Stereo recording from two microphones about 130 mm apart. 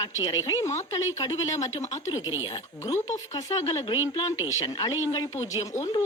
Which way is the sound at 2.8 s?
25° left (ahead or behind).